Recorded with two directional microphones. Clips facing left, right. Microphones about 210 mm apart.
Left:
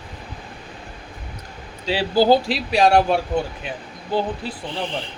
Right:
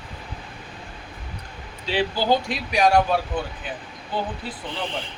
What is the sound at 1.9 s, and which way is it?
Speech, 40° left (ahead or behind).